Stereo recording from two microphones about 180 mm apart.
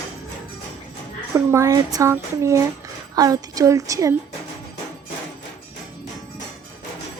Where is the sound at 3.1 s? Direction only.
20° right (ahead or behind).